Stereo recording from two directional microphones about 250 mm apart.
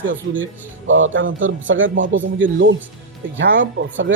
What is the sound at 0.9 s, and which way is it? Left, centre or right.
Speech, right.